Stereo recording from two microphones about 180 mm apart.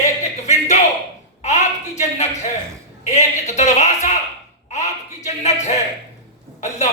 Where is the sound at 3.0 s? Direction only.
40° left (ahead or behind).